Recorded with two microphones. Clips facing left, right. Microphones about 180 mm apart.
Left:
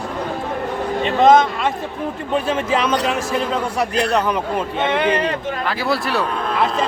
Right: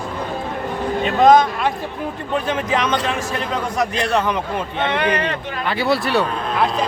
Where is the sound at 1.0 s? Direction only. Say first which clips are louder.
Even; centre (ahead or behind).